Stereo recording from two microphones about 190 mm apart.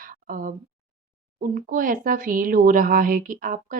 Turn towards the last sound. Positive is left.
turn(degrees=-45)  # may be behind; listen again after turning